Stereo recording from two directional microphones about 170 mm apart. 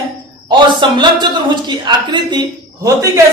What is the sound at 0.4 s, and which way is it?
A man's voice, 25° right (ahead or behind).